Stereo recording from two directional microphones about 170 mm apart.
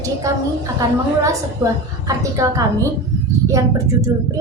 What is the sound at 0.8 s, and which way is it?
A woman's voice, 20° right (ahead or behind).